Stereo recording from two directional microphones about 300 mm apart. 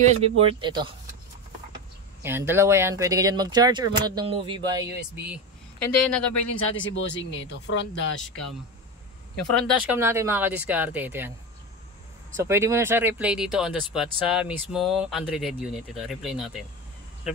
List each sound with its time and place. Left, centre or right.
0.0 s speech: right
2.2 s speech: centre
6.3 s speech: left
9.6 s speech: centre
12.4 s speech: centre